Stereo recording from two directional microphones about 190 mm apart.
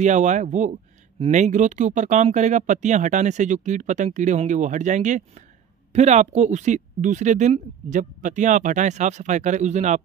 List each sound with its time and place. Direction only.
0.0 s speech: 40° right (ahead or behind)